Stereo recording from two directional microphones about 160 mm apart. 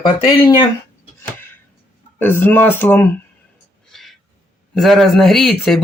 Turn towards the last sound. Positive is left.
turn(degrees=0)  # may be behind; listen again after turning